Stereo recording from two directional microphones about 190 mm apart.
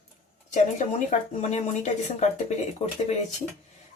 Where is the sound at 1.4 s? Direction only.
40° left (ahead or behind).